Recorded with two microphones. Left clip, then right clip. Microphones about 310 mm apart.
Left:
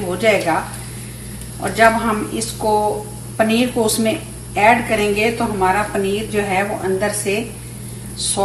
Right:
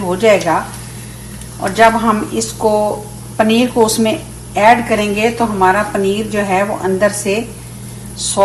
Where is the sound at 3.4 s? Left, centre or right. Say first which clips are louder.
Right 5 dB; right.